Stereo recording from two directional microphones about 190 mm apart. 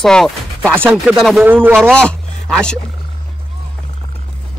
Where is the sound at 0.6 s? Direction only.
10° right (ahead or behind).